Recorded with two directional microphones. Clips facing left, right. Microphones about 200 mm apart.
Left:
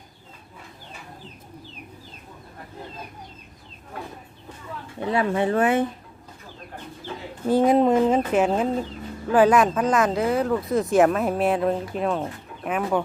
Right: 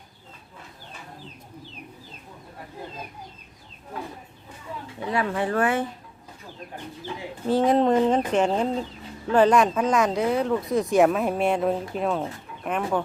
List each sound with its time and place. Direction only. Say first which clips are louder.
5.1 s speech: left 3 dB; 25° left (ahead or behind)
7.4 s speech: left 2 dB; 10° left (ahead or behind)